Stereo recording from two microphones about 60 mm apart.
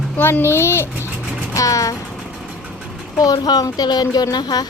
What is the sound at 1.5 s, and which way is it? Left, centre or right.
Music, left.